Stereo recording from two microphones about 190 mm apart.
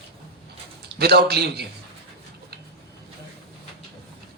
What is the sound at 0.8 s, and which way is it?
Speech, 55° right (ahead or behind).